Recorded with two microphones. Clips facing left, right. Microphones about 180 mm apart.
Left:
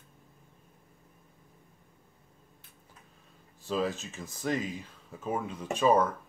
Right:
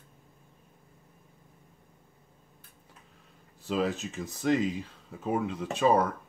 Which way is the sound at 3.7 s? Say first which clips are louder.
Right 2 dB; 20° right (ahead or behind).